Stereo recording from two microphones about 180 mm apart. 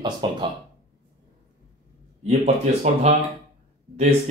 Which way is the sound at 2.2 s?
40° right (ahead or behind).